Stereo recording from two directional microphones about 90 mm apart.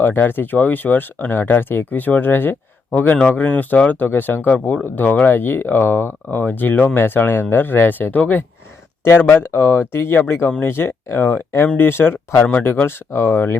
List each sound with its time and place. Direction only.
0.0 s speech: 20° left (ahead or behind)